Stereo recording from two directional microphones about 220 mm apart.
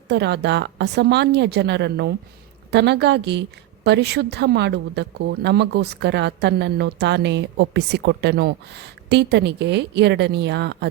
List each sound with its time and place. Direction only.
0.1 s a woman's voice: 50° right (ahead or behind)